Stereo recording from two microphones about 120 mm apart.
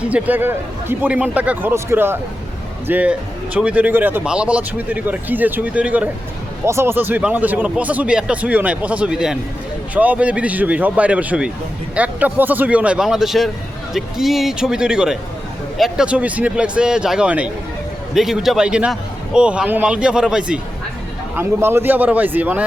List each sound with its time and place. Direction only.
0.0 s a man's voice: 10° right (ahead or behind)
6.7 s a man's voice: 20° right (ahead or behind); by 20.6 s 5° right (ahead or behind)
21.3 s a man's voice: 20° right (ahead or behind)